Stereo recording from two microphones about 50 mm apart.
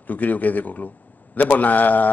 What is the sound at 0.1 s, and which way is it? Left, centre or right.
A man's voice, left.